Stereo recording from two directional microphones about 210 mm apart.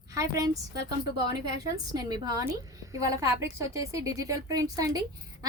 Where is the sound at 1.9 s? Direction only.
20° right (ahead or behind).